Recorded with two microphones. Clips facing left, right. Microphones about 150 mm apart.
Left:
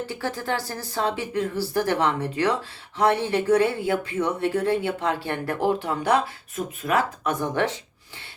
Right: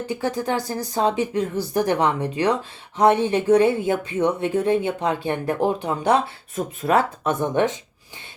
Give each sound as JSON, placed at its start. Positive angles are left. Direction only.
{"t": 0.1, "sound": "speech", "side_deg": -15}
{"t": 6.6, "sound": "speech", "side_deg": -30}